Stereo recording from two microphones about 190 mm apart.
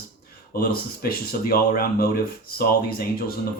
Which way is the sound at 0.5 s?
50° left (ahead or behind).